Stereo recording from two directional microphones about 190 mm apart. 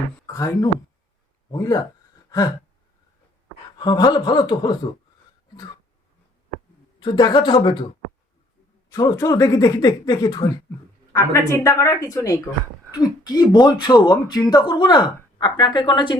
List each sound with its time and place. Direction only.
0.3 s speech: 20° left (ahead or behind)
3.8 s speech: 20° left (ahead or behind)
7.0 s speech: 25° left (ahead or behind)
8.9 s speech: 20° left (ahead or behind)